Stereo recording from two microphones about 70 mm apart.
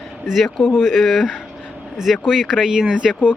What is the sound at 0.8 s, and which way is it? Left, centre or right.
Speech, centre.